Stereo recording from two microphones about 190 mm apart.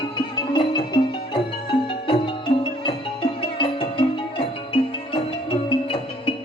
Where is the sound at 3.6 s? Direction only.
25° left (ahead or behind).